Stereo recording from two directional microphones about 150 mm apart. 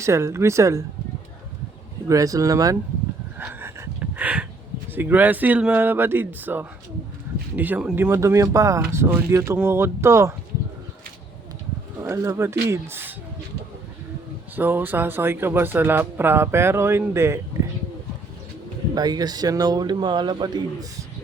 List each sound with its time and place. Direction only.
0.0 s a man's voice: 20° right (ahead or behind)
2.0 s a man's voice: 25° right (ahead or behind)
3.3 s a sound: 15° right (ahead or behind)
4.9 s speech: 15° right (ahead or behind)
11.9 s speech: 20° right (ahead or behind)
14.5 s speech: 15° right (ahead or behind)
18.9 s a man's voice: 25° right (ahead or behind)